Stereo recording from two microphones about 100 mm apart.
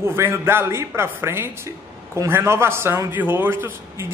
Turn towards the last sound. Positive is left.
turn(degrees=-25)  # may be behind; listen again after turning